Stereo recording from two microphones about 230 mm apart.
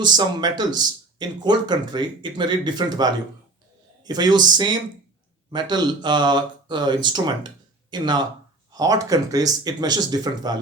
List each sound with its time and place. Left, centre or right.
0.0 s speech: centre